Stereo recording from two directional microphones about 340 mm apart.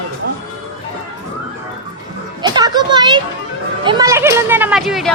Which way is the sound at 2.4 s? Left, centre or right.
Centre.